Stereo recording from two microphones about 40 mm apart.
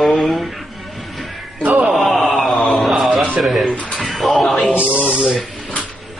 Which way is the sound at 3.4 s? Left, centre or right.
Centre.